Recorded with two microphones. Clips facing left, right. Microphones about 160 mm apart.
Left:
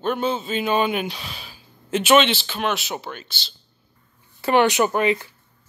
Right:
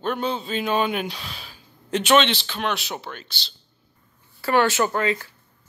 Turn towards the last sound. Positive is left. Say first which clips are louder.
# left 3 dB
turn(degrees=20)  # may be behind; listen again after turning